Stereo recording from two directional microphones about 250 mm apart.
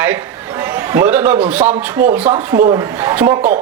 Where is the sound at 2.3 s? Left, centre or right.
Right.